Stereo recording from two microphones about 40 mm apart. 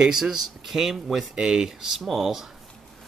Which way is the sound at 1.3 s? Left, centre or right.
Right.